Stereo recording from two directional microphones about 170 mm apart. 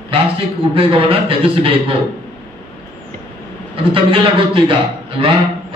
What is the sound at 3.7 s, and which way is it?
A man's voice, 30° right (ahead or behind).